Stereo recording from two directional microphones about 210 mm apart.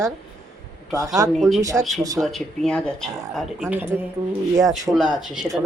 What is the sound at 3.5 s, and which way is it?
Speech, 10° right (ahead or behind).